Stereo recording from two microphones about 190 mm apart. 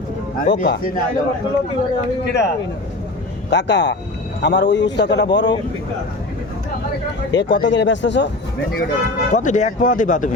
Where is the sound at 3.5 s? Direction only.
65° left (ahead or behind).